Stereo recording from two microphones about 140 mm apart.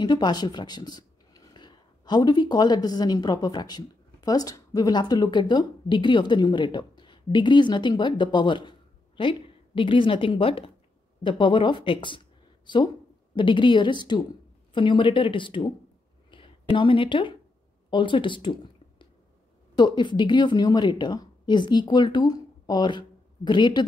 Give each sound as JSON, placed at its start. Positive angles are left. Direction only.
{"t": 0.0, "sound": "a woman's voice", "side_deg": 30}
{"t": 16.3, "sound": "a sound", "side_deg": 40}
{"t": 17.8, "sound": "a woman's voice", "side_deg": 35}